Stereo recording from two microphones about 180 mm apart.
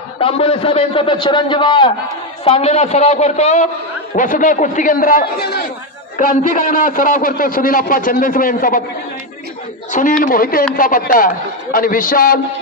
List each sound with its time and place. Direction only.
0.2 s a man's voice: 30° left (ahead or behind); by 5.6 s 60° left (ahead or behind)
6.1 s a man's voice: 45° left (ahead or behind)
9.8 s a sound: 45° left (ahead or behind)
10.2 s a man's voice: 50° left (ahead or behind)